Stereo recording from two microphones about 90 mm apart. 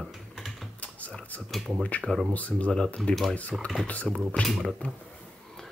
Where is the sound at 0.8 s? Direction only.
15° left (ahead or behind).